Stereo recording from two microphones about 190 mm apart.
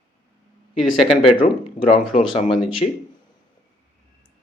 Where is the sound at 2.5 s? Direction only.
Centre (ahead or behind).